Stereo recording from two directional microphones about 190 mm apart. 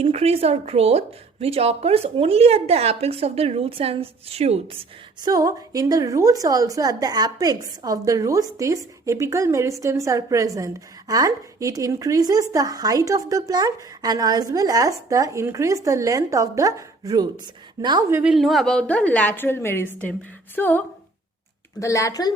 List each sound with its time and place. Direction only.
0.0 s a woman's voice: 30° right (ahead or behind)
18.2 s a woman's voice: 5° right (ahead or behind); by 22.3 s 20° left (ahead or behind)